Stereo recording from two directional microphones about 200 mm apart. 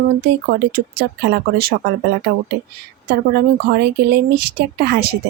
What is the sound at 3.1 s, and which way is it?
A woman's voice, 50° right (ahead or behind).